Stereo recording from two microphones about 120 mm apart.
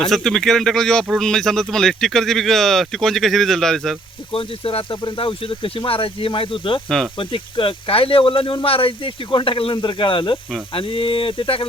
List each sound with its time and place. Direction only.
0.0 s speech: 5° left (ahead or behind)
4.3 s speech: 50° left (ahead or behind)